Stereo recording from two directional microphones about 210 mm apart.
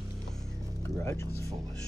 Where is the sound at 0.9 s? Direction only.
15° left (ahead or behind).